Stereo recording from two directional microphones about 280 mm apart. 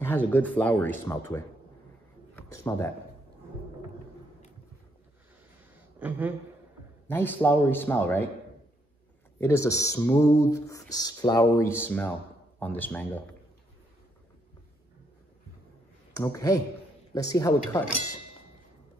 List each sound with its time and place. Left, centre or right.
0.0 s speech: centre
5.9 s a woman's voice: centre
7.1 s speech: centre
9.4 s speech: centre
16.1 s speech: centre